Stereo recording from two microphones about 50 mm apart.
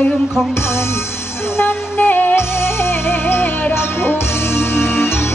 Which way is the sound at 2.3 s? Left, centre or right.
Left.